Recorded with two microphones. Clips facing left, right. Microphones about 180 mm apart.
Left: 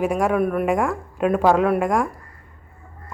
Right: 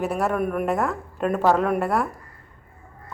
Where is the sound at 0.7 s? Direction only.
10° left (ahead or behind).